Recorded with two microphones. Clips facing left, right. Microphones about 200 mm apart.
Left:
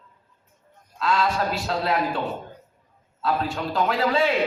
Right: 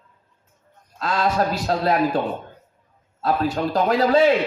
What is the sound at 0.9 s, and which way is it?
A man's voice, 40° right (ahead or behind).